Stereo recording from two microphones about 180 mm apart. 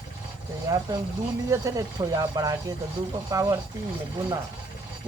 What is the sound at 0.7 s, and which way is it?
Speech, 20° right (ahead or behind).